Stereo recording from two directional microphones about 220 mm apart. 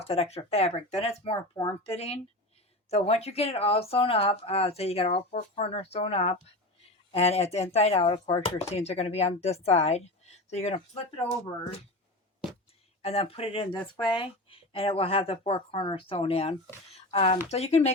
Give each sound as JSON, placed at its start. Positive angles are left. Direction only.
{"t": 0.0, "sound": "speech", "side_deg": 25}
{"t": 13.0, "sound": "speech", "side_deg": 25}